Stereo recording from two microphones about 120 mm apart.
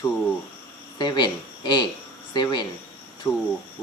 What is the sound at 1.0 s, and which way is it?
Speech, 40° left (ahead or behind).